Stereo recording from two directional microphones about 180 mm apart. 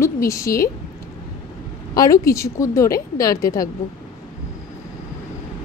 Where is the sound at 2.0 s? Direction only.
20° left (ahead or behind).